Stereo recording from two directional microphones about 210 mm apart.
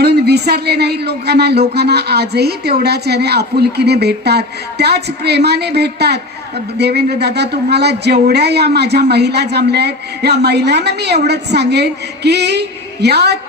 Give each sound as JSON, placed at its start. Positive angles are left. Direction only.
{"t": 0.0, "sound": "speech", "side_deg": -50}